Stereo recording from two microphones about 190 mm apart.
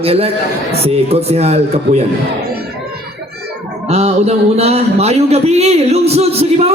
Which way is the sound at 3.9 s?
35° right (ahead or behind).